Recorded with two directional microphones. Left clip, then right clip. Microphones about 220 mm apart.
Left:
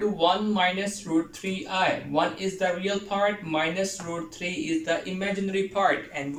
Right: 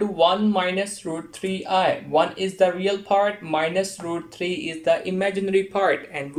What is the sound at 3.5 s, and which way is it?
Speech, 45° right (ahead or behind).